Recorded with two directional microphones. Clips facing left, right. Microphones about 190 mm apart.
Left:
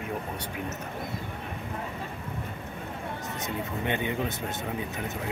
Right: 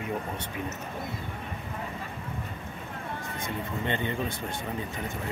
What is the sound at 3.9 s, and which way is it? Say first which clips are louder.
Speech: left 1 dB; 15° left (ahead or behind).